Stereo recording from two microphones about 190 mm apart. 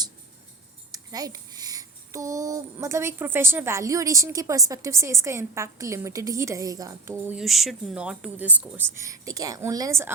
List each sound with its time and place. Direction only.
0.9 s a child's voice: 20° right (ahead or behind)
7.3 s a child's voice: centre (ahead or behind)